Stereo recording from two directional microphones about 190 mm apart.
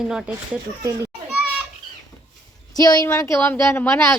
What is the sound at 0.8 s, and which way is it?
Speech, 15° right (ahead or behind).